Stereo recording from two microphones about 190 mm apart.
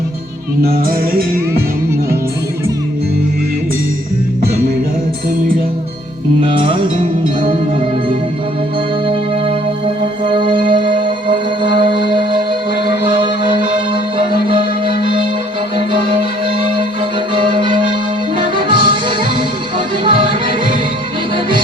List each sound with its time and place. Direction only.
0.6 s music: 55° right (ahead or behind)
6.4 s music: 25° right (ahead or behind)
9.0 s music: 30° right (ahead or behind)
13.7 s music: 25° right (ahead or behind)
17.3 s music: 25° right (ahead or behind)